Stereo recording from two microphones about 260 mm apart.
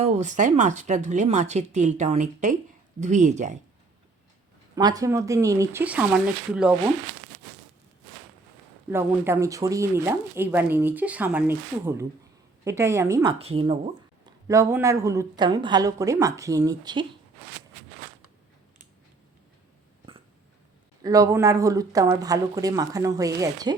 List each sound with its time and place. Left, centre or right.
0.0 s speech: right
4.7 s speech: centre
8.9 s speech: centre
21.0 s speech: centre